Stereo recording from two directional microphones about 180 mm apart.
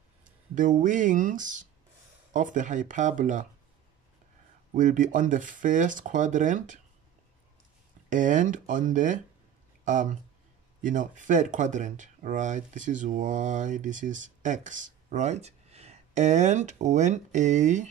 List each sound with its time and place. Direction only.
0.2 s speech: 45° right (ahead or behind)
4.7 s speech: 45° right (ahead or behind)
8.1 s speech: 45° right (ahead or behind)